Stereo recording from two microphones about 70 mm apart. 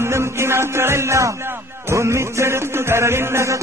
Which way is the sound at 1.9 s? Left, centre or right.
Right.